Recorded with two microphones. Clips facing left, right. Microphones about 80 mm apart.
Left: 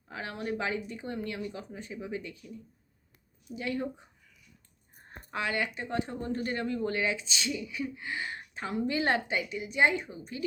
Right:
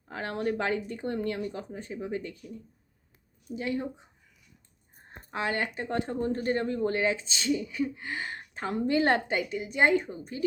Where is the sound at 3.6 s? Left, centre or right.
Right.